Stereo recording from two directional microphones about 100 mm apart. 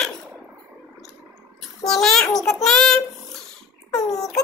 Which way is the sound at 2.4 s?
5° left (ahead or behind).